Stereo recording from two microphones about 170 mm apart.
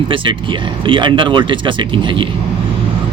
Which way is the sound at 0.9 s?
30° right (ahead or behind).